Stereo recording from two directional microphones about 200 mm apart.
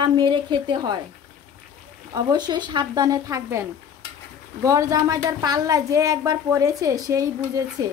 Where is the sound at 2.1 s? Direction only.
20° right (ahead or behind).